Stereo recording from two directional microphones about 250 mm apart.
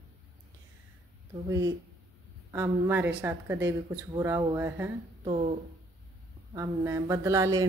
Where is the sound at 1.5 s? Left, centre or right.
Centre.